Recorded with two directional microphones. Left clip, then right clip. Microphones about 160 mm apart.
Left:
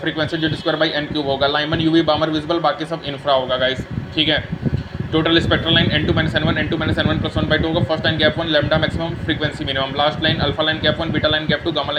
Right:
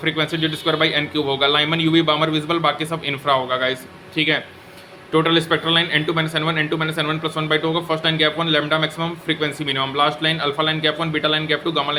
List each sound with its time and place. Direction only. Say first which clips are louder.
0.0 s speech: even; 15° right (ahead or behind)
5.1 s speech: left 1 dB; 10° right (ahead or behind)